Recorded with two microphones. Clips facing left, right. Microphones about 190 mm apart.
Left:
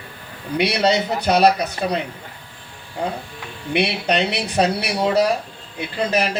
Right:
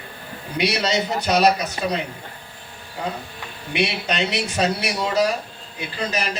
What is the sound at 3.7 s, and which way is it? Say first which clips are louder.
Speech: left 4 dB; 60° left (ahead or behind).